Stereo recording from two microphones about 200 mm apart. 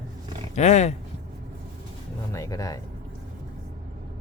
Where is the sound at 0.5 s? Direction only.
35° left (ahead or behind).